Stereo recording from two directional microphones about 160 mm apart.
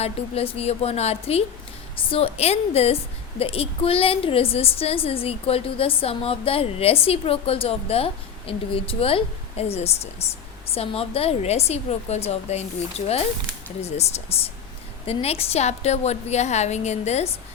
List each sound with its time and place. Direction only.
0.0 s a woman's voice: 40° left (ahead or behind)